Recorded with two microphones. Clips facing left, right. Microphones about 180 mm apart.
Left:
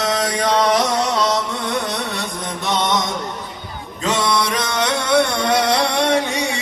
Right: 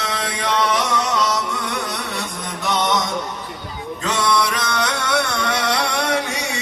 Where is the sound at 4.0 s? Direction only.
20° left (ahead or behind).